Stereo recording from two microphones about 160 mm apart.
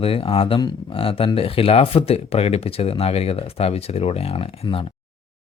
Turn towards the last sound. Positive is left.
turn(degrees=35)  # may be behind; listen again after turning